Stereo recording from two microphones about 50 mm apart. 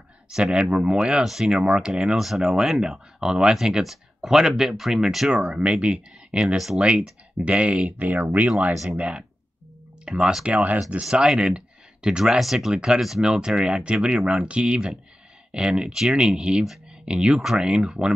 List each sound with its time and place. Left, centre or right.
0.3 s speech: centre
2.1 s speech: centre
5.5 s speech: centre
6.5 s speech: centre
7.3 s speech: right
10.4 s speech: right
17.4 s speech: centre